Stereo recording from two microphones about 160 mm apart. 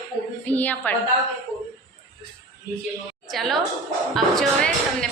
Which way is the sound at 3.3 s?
Centre (ahead or behind).